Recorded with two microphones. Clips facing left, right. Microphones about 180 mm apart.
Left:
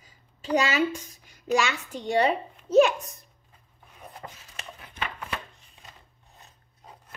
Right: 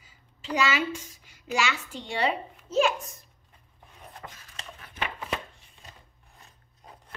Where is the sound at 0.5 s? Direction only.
40° left (ahead or behind).